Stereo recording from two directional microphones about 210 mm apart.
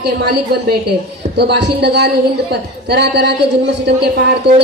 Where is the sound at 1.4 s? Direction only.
50° right (ahead or behind).